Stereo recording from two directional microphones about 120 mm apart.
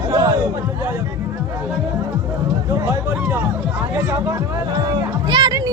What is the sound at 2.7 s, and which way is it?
Speech, 20° right (ahead or behind).